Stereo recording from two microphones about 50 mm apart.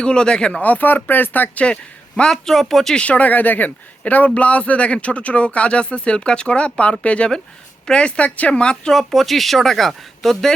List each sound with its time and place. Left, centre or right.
0.0 s speech: centre
0.6 s speech: left
1.6 s speech: left
2.3 s speech: centre
2.9 s speech: left
8.9 s speech: centre